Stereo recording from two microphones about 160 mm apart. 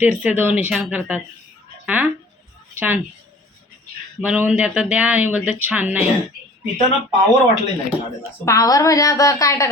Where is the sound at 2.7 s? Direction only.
10° right (ahead or behind).